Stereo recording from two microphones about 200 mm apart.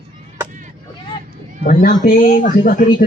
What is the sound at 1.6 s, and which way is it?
Speech, 45° left (ahead or behind).